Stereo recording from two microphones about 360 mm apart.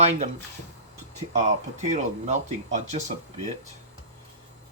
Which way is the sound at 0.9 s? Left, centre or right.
Right.